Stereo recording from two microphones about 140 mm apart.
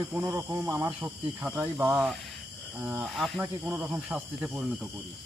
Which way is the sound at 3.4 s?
10° right (ahead or behind).